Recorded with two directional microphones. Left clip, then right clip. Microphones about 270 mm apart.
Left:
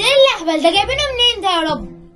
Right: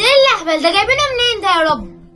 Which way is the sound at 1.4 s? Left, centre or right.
Right.